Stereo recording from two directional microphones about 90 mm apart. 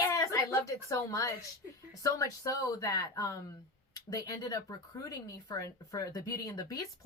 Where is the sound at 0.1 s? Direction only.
35° left (ahead or behind).